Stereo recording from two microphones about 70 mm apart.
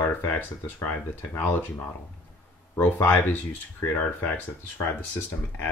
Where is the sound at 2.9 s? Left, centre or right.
Left.